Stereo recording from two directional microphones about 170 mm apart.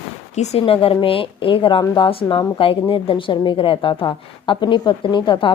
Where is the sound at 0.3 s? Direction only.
40° left (ahead or behind).